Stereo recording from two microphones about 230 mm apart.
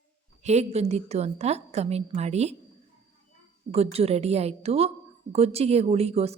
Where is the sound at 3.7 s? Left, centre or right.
Right.